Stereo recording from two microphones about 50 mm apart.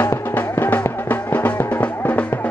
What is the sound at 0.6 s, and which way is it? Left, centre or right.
Music, left.